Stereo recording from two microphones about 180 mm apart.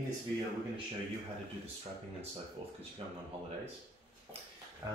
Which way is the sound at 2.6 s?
30° right (ahead or behind).